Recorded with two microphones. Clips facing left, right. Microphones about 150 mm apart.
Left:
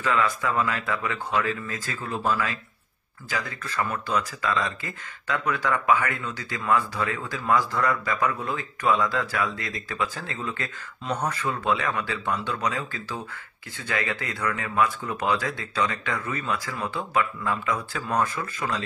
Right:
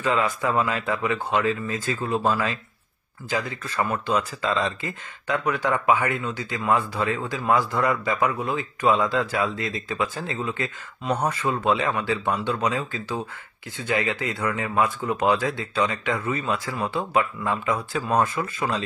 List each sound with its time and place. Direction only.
0.0 s speech: 20° right (ahead or behind)